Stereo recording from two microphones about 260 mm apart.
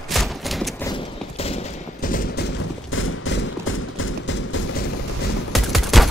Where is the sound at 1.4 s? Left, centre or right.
Left.